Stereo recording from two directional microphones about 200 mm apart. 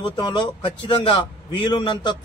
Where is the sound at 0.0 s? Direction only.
20° left (ahead or behind).